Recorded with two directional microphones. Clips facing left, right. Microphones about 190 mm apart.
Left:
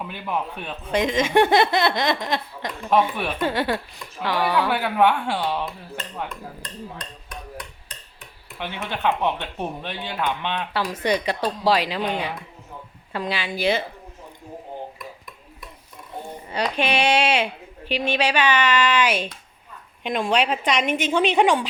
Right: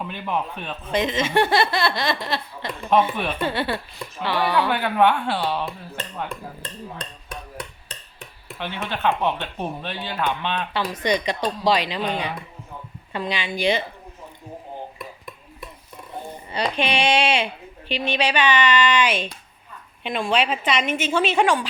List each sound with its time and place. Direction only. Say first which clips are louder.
0.1 s speech: even; 10° left (ahead or behind)
6.2 s dishes: right 2 dB; 30° right (ahead or behind)
8.5 s speech: right 1 dB; 15° left (ahead or behind)
16.5 s speech: even; 10° left (ahead or behind)